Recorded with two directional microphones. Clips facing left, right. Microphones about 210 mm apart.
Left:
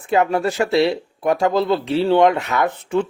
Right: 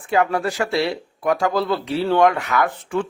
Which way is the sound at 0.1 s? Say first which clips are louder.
Left 2 dB; 20° left (ahead or behind).